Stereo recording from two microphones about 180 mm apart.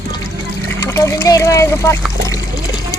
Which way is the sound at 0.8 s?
15° left (ahead or behind).